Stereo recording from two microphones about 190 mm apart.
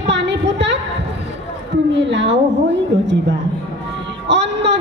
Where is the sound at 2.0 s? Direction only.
70° right (ahead or behind).